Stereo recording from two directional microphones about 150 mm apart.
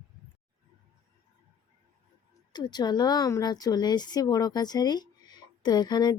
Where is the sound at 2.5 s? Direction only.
30° left (ahead or behind).